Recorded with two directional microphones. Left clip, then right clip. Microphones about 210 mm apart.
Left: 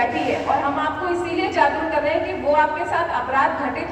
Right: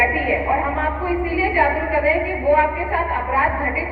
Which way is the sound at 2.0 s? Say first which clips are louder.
Right 2 dB; 20° left (ahead or behind).